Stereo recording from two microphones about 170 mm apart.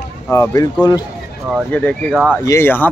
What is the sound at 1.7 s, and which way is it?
Speech, 10° left (ahead or behind).